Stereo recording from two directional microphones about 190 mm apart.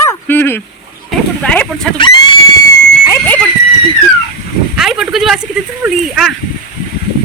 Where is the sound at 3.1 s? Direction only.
10° left (ahead or behind).